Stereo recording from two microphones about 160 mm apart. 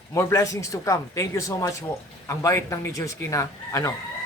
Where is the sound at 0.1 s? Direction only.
20° left (ahead or behind).